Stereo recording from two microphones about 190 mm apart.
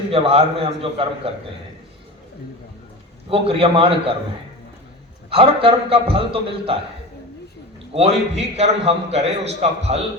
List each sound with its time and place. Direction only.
0.1 s a man's voice: 30° right (ahead or behind)
3.2 s a man's voice: 30° right (ahead or behind)
5.3 s a man's voice: 30° right (ahead or behind)
7.9 s a man's voice: 35° right (ahead or behind)